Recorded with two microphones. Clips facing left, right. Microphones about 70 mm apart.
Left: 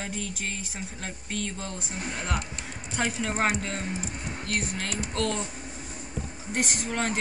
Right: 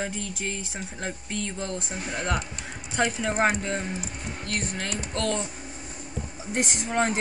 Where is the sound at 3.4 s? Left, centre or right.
Right.